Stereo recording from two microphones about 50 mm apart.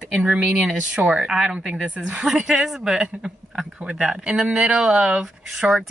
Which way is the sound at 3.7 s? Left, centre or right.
Centre.